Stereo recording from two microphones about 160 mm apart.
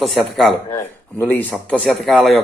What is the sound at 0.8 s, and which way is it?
A man's voice, 10° left (ahead or behind).